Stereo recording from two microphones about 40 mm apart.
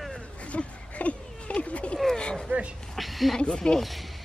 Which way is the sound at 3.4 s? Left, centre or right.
Centre.